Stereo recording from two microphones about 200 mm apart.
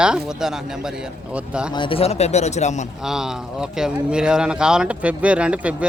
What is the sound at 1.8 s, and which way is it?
Speech, 25° left (ahead or behind).